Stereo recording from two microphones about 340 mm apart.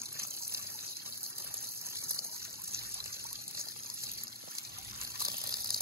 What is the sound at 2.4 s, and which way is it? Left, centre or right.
Trickle, centre.